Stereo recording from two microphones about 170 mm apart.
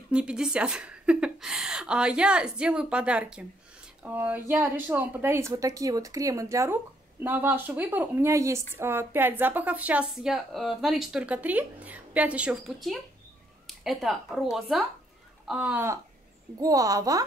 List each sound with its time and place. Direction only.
0.1 s a woman's voice: 5° right (ahead or behind)